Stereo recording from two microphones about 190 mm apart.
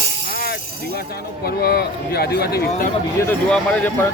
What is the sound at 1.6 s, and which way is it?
A man's voice, 55° left (ahead or behind).